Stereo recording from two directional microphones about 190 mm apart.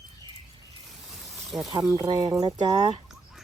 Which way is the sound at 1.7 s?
20° right (ahead or behind).